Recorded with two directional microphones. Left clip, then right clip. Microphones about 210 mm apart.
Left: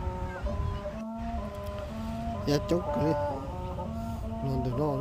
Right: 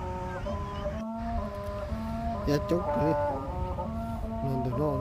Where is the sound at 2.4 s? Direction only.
5° left (ahead or behind).